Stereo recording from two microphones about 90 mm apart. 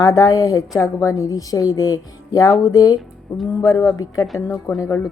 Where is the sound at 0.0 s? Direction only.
40° left (ahead or behind).